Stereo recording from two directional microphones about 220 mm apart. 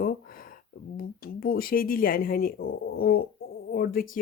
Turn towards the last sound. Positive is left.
turn(degrees=40)  # may be behind; listen again after turning